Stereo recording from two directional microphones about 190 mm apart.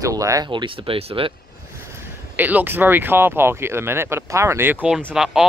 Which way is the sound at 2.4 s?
10° right (ahead or behind).